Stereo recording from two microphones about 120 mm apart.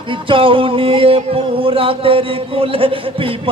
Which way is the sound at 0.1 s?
45° right (ahead or behind).